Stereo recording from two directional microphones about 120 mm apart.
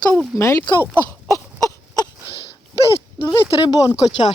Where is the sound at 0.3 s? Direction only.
20° left (ahead or behind).